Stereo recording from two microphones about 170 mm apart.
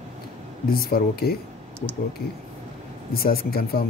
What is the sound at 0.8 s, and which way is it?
Speech, 60° left (ahead or behind).